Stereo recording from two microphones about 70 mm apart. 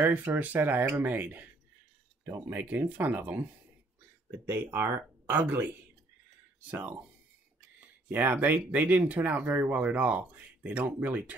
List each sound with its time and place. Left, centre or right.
0.0 s speech: right
4.5 s speech: right
6.7 s speech: right
8.1 s speech: right